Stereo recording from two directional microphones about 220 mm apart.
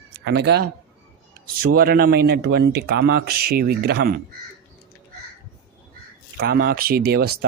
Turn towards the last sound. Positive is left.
turn(degrees=-45)  # may be behind; listen again after turning